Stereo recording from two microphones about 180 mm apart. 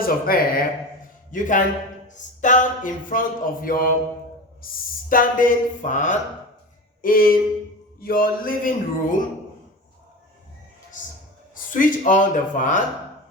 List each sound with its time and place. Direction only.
0.0 s speech: 55° left (ahead or behind)
5.0 s speech: 50° left (ahead or behind)
11.5 s speech: 50° left (ahead or behind)